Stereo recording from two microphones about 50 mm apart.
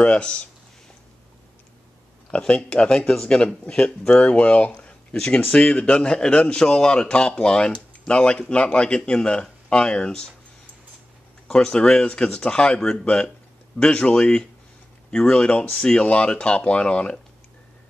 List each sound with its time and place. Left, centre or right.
0.0 s speech: left
2.3 s speech: left
4.7 s a sound: centre
5.5 s speech: left
11.4 s speech: centre